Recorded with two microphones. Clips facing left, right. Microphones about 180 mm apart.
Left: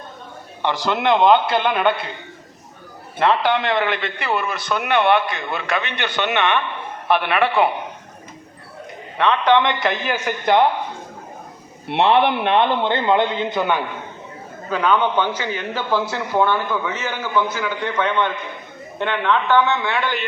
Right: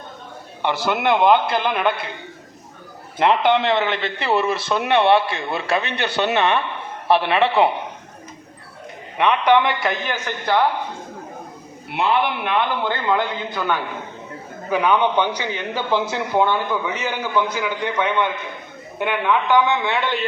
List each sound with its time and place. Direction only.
0.9 s a man's voice: 5° right (ahead or behind)
3.2 s a man's voice: 20° right (ahead or behind)
9.1 s a man's voice: 15° right (ahead or behind)
10.2 s a man's voice: 20° left (ahead or behind)
11.9 s a man's voice: 30° left (ahead or behind)
14.7 s a man's voice: 15° right (ahead or behind)